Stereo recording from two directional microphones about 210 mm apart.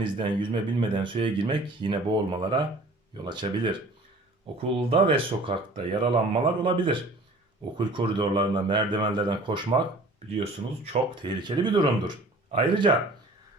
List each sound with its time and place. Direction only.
0.0 s speech: 20° right (ahead or behind)
11.1 s speech: 20° right (ahead or behind)